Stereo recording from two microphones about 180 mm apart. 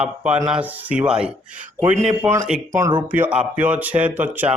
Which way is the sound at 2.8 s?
25° right (ahead or behind).